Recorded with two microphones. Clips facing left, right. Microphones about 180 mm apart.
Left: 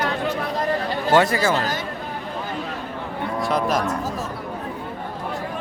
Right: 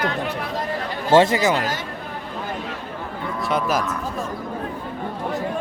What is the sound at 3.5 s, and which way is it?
Speech, 5° right (ahead or behind).